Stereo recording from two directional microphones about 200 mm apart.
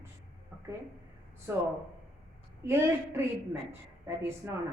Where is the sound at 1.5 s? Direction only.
15° right (ahead or behind).